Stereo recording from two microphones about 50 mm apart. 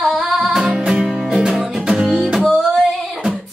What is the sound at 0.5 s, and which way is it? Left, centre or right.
Music, centre.